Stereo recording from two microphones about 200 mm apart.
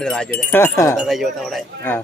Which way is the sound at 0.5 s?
15° left (ahead or behind).